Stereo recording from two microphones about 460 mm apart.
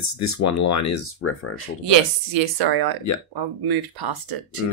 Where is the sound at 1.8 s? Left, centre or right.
Right.